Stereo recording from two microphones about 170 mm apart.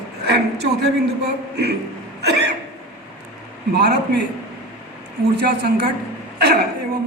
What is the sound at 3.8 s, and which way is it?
Speech, 75° right (ahead or behind).